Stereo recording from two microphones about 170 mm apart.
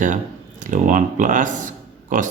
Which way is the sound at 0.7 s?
50° right (ahead or behind).